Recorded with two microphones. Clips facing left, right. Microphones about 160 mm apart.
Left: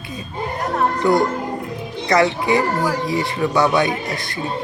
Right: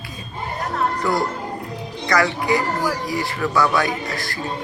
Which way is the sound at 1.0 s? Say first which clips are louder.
Left 5 dB; 20° left (ahead or behind).